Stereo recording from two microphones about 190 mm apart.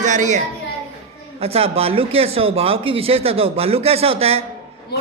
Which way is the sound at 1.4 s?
30° right (ahead or behind).